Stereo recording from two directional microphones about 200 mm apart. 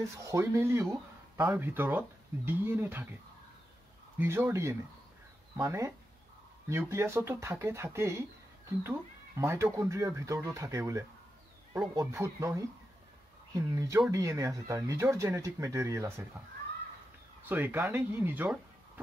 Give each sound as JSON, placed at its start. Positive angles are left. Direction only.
{"t": 0.2, "sound": "speech", "side_deg": -15}
{"t": 4.2, "sound": "speech", "side_deg": -10}
{"t": 17.5, "sound": "speech", "side_deg": -10}